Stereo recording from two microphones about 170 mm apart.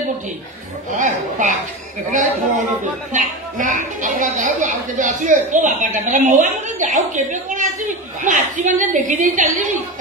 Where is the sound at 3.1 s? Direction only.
50° right (ahead or behind).